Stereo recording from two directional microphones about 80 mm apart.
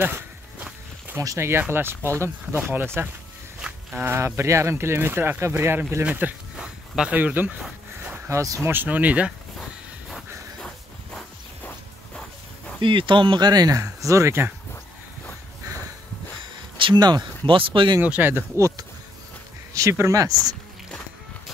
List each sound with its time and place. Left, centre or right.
0.0 s walk: right
1.4 s speech: right
2.5 s speech: right
6.5 s speech: centre
8.3 s speech: right
8.7 s speech: centre
12.8 s speech: right
16.8 s speech: right
17.5 s speech: right
18.0 s speech: centre
18.5 s speech: right